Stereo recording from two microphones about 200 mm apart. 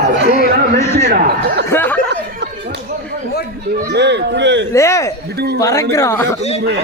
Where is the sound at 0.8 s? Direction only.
15° left (ahead or behind).